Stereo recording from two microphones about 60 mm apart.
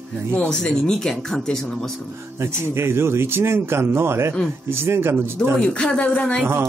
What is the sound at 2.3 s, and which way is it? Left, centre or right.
Speech, right.